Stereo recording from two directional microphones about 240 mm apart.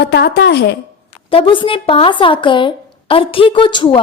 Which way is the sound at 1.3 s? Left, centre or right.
Left.